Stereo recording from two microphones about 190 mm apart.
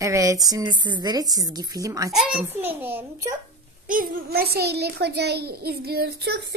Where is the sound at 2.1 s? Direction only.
5° right (ahead or behind).